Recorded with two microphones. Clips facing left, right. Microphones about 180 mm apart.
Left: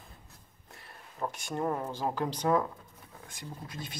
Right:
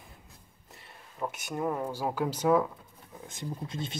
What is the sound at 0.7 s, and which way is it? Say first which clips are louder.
Speech: right 1 dB; centre (ahead or behind).